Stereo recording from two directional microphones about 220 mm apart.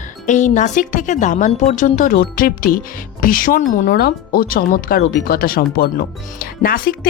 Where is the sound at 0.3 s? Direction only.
35° left (ahead or behind).